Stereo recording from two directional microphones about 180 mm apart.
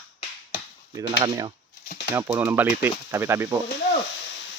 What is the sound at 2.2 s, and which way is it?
Speech, 10° right (ahead or behind).